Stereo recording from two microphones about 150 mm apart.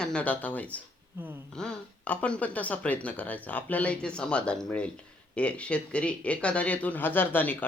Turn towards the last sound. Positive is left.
turn(degrees=10)  # may be behind; listen again after turning